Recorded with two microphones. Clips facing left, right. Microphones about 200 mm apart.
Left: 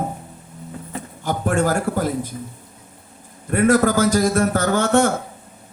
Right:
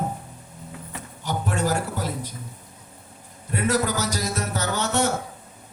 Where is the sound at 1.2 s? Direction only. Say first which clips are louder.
Left 5 dB; 50° left (ahead or behind).